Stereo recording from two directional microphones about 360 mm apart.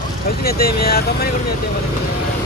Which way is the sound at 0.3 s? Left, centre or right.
Left.